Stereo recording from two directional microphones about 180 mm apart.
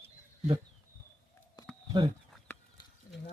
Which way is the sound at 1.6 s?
20° left (ahead or behind).